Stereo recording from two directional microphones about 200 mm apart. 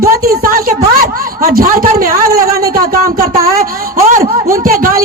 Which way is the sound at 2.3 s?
15° right (ahead or behind).